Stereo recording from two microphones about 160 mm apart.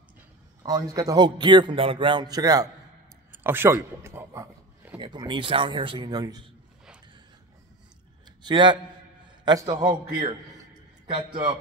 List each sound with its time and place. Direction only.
0.7 s a man's voice: 25° right (ahead or behind)
4.9 s speech: 30° right (ahead or behind)
8.4 s a man's voice: 30° right (ahead or behind)
11.1 s a man's voice: 35° right (ahead or behind)